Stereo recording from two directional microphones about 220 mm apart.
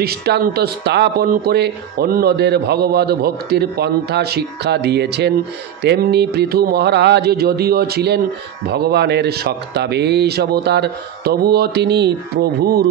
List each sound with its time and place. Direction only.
0.0 s speech: 45° right (ahead or behind)